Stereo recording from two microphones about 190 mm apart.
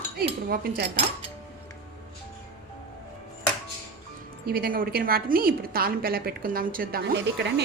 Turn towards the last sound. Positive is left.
turn(degrees=-65)  # may be behind; listen again after turning